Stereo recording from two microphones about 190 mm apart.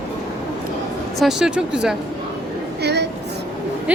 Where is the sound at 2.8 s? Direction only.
60° right (ahead or behind).